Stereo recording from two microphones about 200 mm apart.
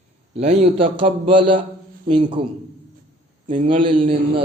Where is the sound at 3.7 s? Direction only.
25° right (ahead or behind).